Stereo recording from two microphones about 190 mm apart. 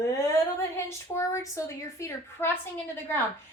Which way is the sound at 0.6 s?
15° left (ahead or behind).